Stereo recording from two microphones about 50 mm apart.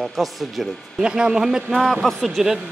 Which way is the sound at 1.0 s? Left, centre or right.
Centre.